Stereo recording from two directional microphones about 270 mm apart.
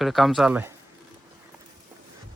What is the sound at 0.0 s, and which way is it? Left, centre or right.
Speech, centre.